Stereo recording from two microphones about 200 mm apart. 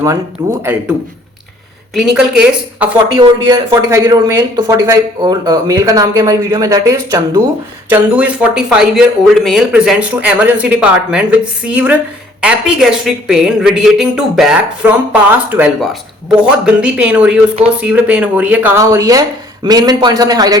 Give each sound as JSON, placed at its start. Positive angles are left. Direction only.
{"t": 0.6, "sound": "a woman's voice", "side_deg": -10}
{"t": 3.2, "sound": "a woman's voice", "side_deg": -20}